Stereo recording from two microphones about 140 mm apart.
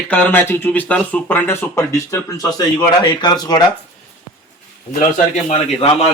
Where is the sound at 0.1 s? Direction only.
15° left (ahead or behind).